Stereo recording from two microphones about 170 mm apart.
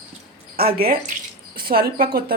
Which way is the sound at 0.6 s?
65° right (ahead or behind).